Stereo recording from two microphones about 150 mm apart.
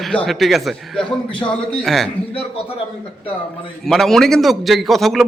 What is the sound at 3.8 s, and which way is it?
Speech, centre (ahead or behind).